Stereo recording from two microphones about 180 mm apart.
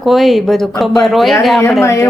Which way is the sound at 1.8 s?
15° left (ahead or behind).